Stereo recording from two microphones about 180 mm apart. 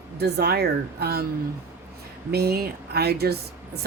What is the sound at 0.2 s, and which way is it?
A woman's voice, 65° right (ahead or behind).